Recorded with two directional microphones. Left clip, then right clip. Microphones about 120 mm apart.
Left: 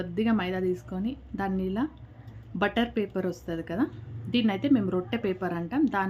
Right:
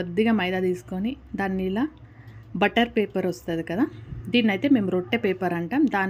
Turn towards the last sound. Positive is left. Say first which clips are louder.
# right 4 dB
turn(degrees=-25)  # may be behind; listen again after turning